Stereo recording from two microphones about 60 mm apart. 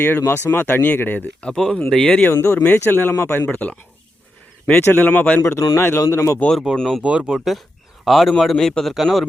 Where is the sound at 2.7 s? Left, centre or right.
Left.